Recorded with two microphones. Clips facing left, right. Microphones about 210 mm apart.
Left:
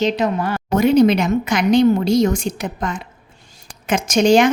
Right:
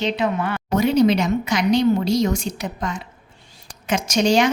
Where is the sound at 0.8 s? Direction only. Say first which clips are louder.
Left 4 dB; 55° left (ahead or behind).